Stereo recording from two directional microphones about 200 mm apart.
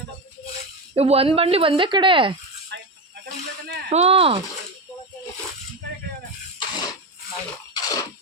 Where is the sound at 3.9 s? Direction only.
30° right (ahead or behind).